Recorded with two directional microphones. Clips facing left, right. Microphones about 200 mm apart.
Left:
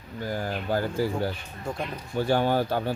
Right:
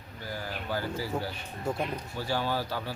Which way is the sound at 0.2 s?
50° left (ahead or behind).